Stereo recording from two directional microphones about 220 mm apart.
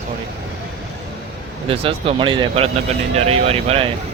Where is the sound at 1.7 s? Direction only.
25° right (ahead or behind).